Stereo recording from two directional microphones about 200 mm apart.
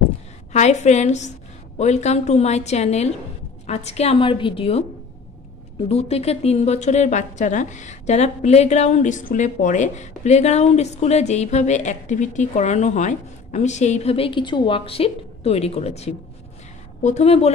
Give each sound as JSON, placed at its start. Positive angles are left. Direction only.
{"t": 0.5, "sound": "a woman's voice", "side_deg": 35}
{"t": 5.9, "sound": "a woman's voice", "side_deg": 30}